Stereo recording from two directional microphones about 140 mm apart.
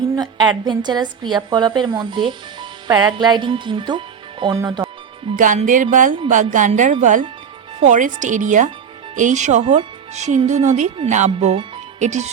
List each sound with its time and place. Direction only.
0.2 s a woman's voice: 30° right (ahead or behind)
5.5 s music: 65° right (ahead or behind)
6.2 s speech: 65° right (ahead or behind)